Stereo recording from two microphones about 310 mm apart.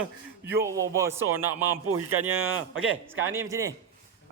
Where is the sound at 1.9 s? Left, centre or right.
Right.